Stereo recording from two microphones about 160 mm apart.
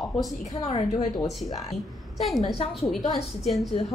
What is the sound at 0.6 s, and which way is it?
Speech, 25° left (ahead or behind).